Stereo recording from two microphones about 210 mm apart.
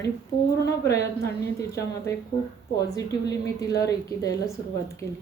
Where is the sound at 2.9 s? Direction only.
15° left (ahead or behind).